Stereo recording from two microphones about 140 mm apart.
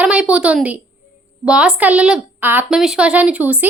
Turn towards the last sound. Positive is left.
turn(degrees=-10)  # may be behind; listen again after turning